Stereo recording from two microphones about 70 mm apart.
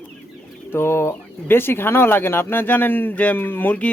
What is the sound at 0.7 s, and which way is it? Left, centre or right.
Speech, left.